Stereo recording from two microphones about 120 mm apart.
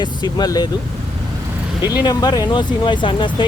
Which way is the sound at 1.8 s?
35° left (ahead or behind).